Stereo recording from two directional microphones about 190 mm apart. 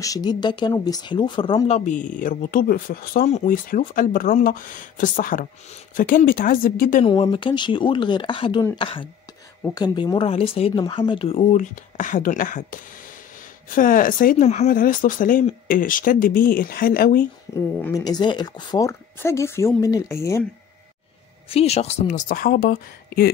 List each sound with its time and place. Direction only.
0.0 s speech: 20° left (ahead or behind)
1.9 s speech: 40° left (ahead or behind)
7.1 s speech: 25° left (ahead or behind); by 17.3 s 50° left (ahead or behind)
17.6 s a woman's voice: 15° left (ahead or behind)
21.5 s speech: 35° left (ahead or behind); by 23.3 s 55° left (ahead or behind)